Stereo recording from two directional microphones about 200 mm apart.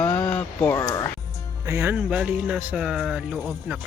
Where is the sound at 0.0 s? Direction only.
10° left (ahead or behind).